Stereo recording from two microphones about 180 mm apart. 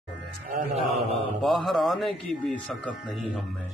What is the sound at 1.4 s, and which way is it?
Speech, centre (ahead or behind).